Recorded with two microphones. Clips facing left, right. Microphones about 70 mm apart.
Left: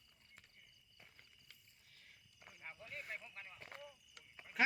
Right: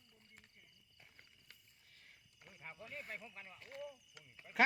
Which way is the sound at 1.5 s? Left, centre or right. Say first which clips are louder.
Right 1 dB; right.